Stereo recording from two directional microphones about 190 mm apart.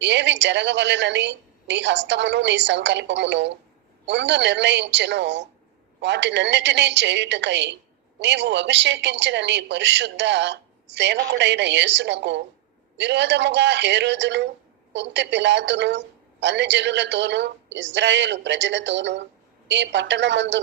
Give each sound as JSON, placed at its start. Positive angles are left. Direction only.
{"t": 0.0, "sound": "a woman's voice", "side_deg": -65}